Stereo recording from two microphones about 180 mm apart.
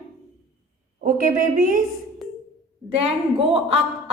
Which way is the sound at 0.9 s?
50° right (ahead or behind).